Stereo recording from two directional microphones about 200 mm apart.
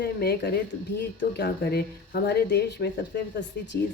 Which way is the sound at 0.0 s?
55° left (ahead or behind).